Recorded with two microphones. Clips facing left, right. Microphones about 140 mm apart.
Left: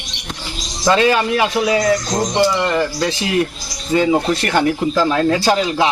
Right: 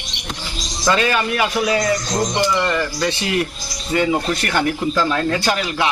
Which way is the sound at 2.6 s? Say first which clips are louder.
Left 2 dB; 20° left (ahead or behind).